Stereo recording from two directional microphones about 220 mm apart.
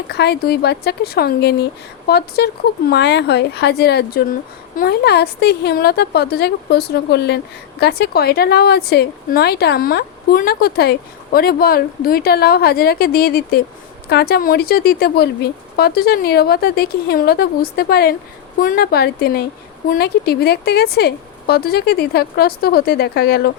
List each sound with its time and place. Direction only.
0.1 s speech: 45° left (ahead or behind)